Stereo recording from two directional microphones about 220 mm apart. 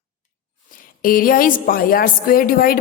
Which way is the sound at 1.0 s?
40° left (ahead or behind).